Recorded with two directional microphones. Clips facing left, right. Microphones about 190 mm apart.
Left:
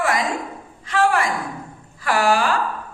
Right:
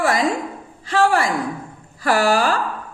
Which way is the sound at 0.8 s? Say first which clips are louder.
Right 2 dB; 35° right (ahead or behind).